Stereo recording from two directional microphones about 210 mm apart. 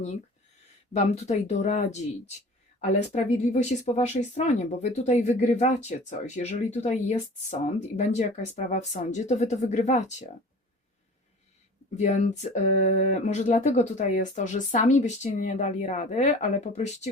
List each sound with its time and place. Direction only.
0.9 s speech: 30° left (ahead or behind)
3.1 s speech: 35° left (ahead or behind)
11.9 s speech: 35° left (ahead or behind)